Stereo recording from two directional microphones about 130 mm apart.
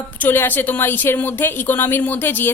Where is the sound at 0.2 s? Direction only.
15° left (ahead or behind).